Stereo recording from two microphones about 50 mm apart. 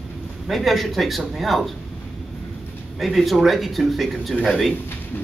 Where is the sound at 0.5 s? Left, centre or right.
Centre.